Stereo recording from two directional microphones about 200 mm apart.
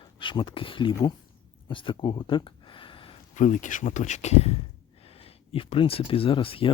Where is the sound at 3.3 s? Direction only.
40° left (ahead or behind).